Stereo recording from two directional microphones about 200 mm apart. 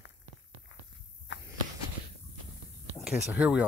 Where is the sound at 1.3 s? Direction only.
65° left (ahead or behind).